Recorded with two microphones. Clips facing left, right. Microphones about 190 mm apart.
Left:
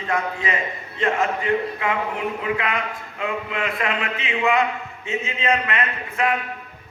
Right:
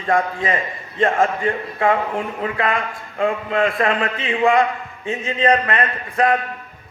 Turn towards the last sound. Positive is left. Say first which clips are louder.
# right 5 dB
turn(degrees=-50)  # may be behind; listen again after turning